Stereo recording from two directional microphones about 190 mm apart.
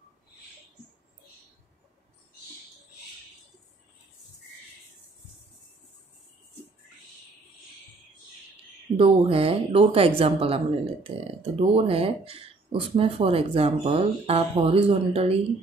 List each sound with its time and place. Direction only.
8.9 s speech: 30° right (ahead or behind)